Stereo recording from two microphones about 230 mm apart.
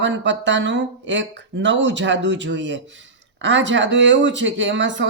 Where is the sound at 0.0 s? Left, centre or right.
Right.